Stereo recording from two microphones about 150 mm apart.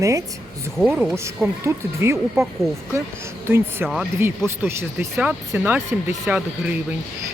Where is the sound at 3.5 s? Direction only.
15° right (ahead or behind).